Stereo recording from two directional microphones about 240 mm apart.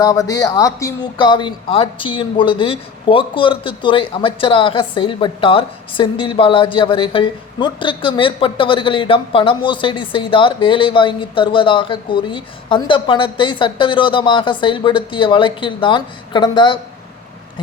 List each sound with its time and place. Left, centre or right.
0.0 s speech: centre